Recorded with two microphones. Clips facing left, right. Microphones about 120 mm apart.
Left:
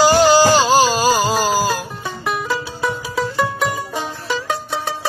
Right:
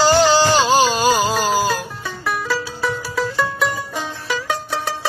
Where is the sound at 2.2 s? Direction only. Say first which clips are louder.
Even; 15° left (ahead or behind).